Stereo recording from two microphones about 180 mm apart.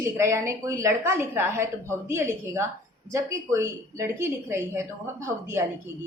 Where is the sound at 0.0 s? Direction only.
15° right (ahead or behind).